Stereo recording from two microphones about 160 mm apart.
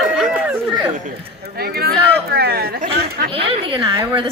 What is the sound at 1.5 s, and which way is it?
Speech, 75° right (ahead or behind).